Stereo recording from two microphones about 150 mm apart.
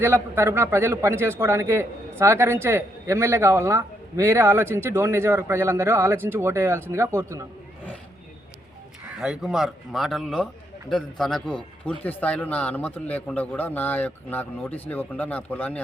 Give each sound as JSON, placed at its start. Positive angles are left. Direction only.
{"t": 0.0, "sound": "a man's voice", "side_deg": -15}
{"t": 9.2, "sound": "a man's voice", "side_deg": -5}